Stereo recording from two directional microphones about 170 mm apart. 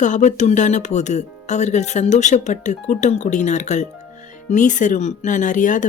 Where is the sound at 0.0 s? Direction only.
45° left (ahead or behind).